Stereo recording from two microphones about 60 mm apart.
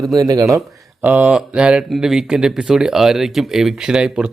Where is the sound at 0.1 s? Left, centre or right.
Right.